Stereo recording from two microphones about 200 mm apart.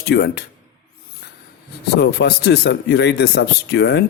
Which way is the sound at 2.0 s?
55° left (ahead or behind).